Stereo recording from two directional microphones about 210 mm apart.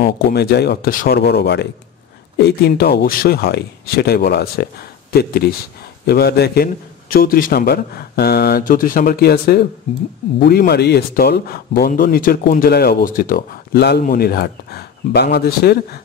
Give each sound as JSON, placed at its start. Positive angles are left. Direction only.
{"t": 0.0, "sound": "speech", "side_deg": 50}